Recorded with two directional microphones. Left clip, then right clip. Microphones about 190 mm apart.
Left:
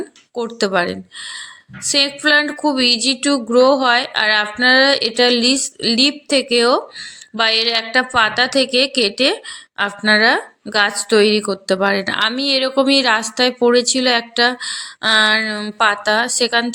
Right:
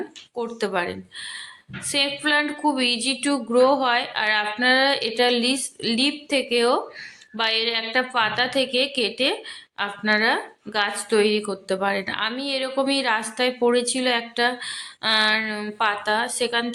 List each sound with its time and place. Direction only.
0.3 s a woman's voice: 30° left (ahead or behind)